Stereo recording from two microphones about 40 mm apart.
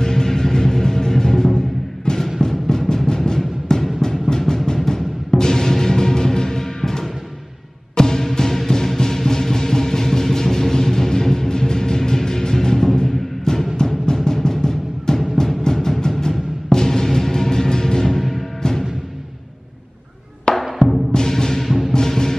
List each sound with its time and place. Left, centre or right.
0.0 s music: centre
2.4 s timpani: centre
4.7 s music: centre
13.7 s timpani: centre
18.6 s music: centre
20.5 s music: left
21.6 s timpani: centre
21.9 s music: centre